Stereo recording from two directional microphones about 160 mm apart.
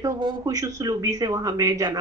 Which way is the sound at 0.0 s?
20° right (ahead or behind).